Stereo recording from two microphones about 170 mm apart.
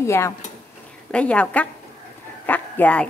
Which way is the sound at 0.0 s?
15° left (ahead or behind).